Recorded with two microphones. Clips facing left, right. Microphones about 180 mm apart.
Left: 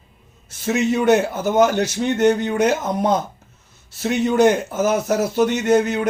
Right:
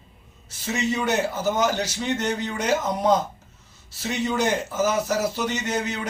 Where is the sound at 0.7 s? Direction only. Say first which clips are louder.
Left 8 dB; 55° left (ahead or behind).